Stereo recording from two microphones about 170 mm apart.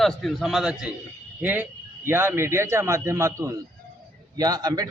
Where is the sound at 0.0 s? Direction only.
Centre (ahead or behind).